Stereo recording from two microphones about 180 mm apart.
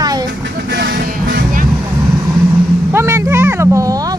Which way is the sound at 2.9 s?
15° right (ahead or behind).